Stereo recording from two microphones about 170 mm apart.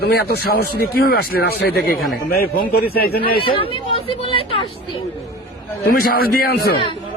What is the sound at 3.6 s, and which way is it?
Speech, 30° left (ahead or behind).